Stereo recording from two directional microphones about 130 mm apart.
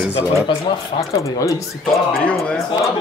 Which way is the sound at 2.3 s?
10° left (ahead or behind).